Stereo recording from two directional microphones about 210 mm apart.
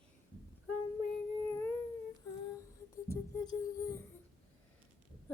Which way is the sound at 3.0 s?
20° left (ahead or behind).